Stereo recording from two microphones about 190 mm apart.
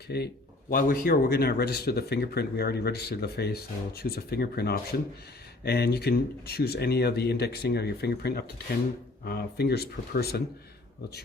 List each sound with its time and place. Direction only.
0.1 s speech: 55° left (ahead or behind)
0.7 s speech: 45° left (ahead or behind)